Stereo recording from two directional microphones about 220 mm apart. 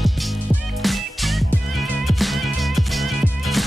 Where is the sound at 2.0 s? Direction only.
Centre (ahead or behind).